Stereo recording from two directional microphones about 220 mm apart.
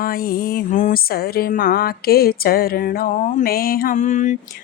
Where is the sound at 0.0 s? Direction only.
40° left (ahead or behind).